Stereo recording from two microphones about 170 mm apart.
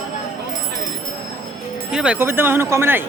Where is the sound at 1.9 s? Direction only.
5° right (ahead or behind).